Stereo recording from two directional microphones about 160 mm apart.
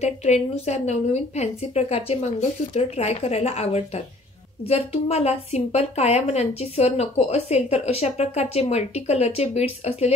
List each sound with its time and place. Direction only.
0.0 s a woman's voice: 45° left (ahead or behind)